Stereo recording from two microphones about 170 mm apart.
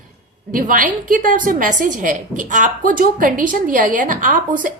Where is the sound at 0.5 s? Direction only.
55° right (ahead or behind).